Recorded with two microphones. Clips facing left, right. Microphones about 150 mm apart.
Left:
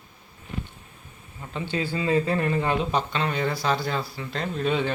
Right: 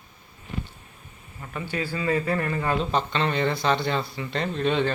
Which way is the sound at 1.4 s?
25° left (ahead or behind).